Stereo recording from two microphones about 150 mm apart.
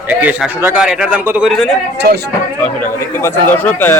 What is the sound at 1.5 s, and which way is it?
Speech, 5° left (ahead or behind).